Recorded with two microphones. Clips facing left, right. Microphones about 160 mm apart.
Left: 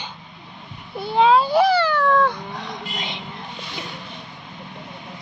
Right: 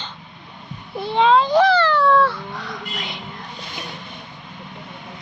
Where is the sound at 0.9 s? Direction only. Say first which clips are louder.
Even; centre (ahead or behind); by 3.2 s 25° left (ahead or behind).